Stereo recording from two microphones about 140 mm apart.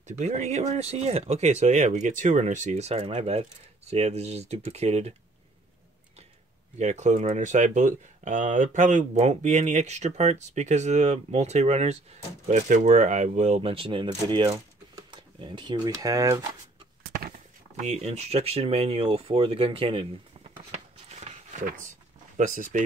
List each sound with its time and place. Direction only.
0.2 s speech: 55° right (ahead or behind)
6.8 s speech: 55° right (ahead or behind)
13.6 s speech: 40° right (ahead or behind); by 16.4 s 25° right (ahead or behind)
17.7 s speech: 55° right (ahead or behind)